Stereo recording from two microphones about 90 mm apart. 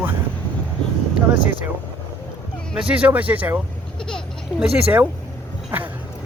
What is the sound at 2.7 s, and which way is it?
Speech, 15° right (ahead or behind).